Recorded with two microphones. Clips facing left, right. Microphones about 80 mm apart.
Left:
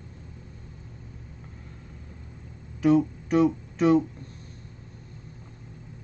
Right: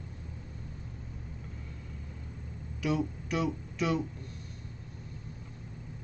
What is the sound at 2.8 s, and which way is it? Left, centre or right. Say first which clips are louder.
Speech: left 10 dB; left.